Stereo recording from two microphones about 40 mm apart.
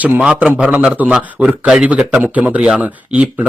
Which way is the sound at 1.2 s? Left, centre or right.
Right.